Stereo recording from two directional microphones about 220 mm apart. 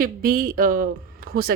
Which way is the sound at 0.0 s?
40° right (ahead or behind).